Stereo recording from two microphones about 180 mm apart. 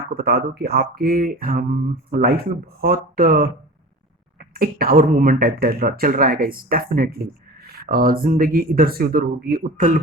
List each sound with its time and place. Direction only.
0.1 s speech: 55° right (ahead or behind)